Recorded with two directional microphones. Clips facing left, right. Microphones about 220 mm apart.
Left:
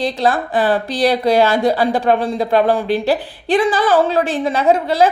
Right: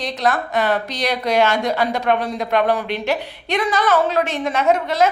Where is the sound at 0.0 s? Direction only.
30° left (ahead or behind).